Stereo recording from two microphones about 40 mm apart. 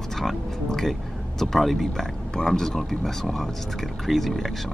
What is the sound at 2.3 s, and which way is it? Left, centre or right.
Speech, centre.